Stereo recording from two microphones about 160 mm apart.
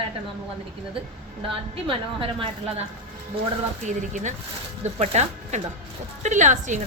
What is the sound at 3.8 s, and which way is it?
A woman's voice, 50° right (ahead or behind).